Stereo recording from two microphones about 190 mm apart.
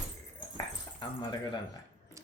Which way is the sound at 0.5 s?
25° left (ahead or behind).